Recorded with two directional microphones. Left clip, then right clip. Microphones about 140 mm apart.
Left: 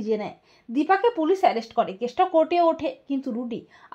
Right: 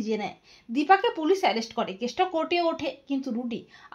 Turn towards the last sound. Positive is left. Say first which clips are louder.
# left 2 dB
turn(degrees=40)  # may be behind; listen again after turning